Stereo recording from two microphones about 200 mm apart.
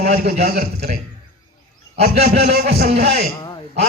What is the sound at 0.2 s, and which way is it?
Speech, 50° right (ahead or behind).